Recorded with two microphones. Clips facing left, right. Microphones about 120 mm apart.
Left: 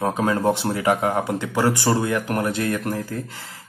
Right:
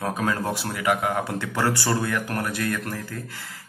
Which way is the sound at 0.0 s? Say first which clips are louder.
Left 5 dB; 25° left (ahead or behind).